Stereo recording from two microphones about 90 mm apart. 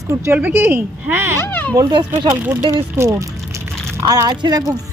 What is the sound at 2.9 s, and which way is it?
Speech, 35° right (ahead or behind).